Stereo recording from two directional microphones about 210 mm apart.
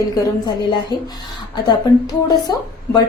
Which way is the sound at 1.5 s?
20° left (ahead or behind).